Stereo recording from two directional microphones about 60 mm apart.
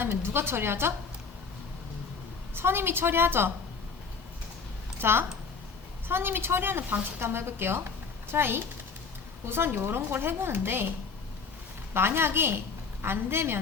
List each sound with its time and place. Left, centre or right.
0.0 s a woman's voice: right
2.6 s a woman's voice: right
4.9 s a woman's voice: right
11.9 s a woman's voice: right